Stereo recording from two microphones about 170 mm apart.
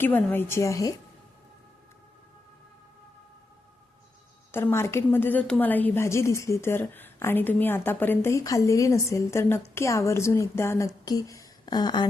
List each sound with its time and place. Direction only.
0.0 s a woman's voice: 10° left (ahead or behind)
4.5 s a woman's voice: 15° left (ahead or behind)